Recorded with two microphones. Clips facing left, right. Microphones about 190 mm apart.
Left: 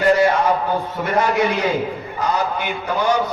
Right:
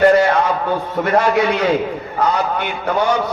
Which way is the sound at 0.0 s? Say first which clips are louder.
Right 3 dB; 60° right (ahead or behind).